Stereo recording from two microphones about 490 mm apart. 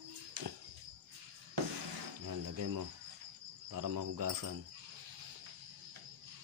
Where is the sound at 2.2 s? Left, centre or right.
Right.